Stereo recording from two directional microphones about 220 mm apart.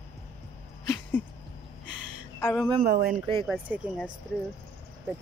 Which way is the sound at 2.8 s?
40° right (ahead or behind).